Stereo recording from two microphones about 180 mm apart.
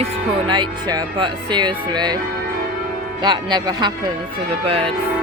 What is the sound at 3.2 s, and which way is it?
Speech, 25° right (ahead or behind).